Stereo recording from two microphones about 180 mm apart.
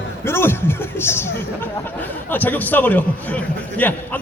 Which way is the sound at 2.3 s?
10° left (ahead or behind).